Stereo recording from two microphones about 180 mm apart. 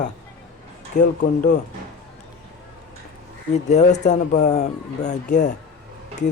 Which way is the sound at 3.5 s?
40° left (ahead or behind).